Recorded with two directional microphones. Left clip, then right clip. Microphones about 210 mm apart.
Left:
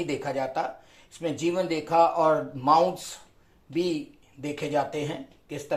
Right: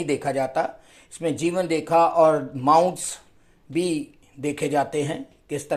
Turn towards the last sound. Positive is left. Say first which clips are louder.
# right 6 dB
turn(degrees=-50)  # may be behind; listen again after turning